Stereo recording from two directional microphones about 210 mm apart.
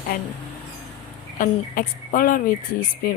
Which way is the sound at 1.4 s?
40° left (ahead or behind).